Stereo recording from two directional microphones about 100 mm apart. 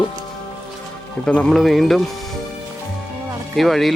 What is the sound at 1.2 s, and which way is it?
Speech, 10° left (ahead or behind).